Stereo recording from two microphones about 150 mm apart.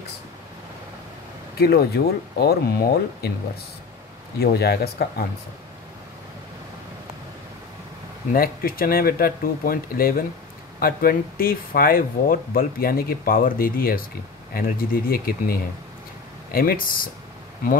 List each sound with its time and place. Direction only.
1.6 s speech: 90° left
4.4 s speech: 90° left
8.3 s speech: 75° left (ahead or behind)
16.5 s speech: 75° left (ahead or behind)